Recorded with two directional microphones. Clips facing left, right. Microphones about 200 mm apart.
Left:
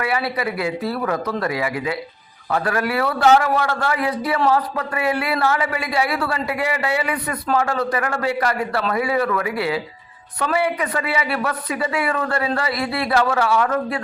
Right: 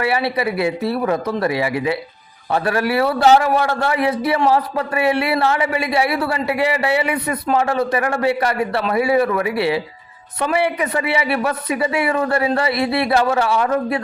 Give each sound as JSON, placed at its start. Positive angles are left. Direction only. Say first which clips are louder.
{"t": 0.0, "sound": "speech", "louder": "right 3 dB", "side_deg": -25}